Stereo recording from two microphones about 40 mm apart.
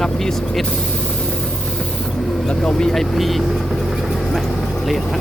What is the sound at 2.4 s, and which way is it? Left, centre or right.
Speech, left.